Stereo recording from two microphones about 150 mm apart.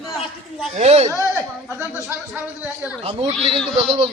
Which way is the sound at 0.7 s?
45° right (ahead or behind).